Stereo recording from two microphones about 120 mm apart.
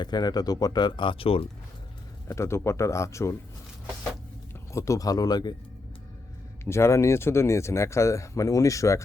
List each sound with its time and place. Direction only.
0.0 s speech: 35° left (ahead or behind); by 1.5 s 50° left (ahead or behind)
2.2 s speech: 25° left (ahead or behind)
4.7 s speech: 25° left (ahead or behind)
6.7 s speech: 20° left (ahead or behind)